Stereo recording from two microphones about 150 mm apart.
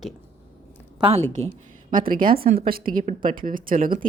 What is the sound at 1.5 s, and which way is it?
A woman's voice, 75° right (ahead or behind).